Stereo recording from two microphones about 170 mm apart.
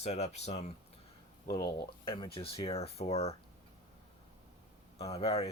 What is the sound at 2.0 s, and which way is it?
Speech, 30° left (ahead or behind).